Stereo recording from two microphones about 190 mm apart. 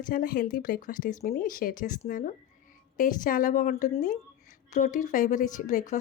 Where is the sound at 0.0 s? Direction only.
45° left (ahead or behind).